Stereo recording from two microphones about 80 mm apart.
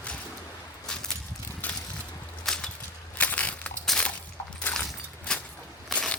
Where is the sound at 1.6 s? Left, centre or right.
Left.